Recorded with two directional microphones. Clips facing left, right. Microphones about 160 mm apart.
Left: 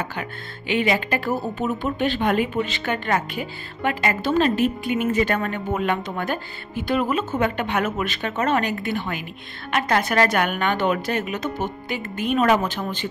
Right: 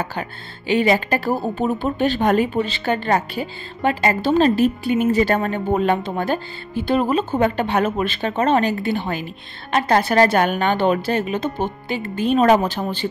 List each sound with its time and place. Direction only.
0.0 s speech: 35° right (ahead or behind)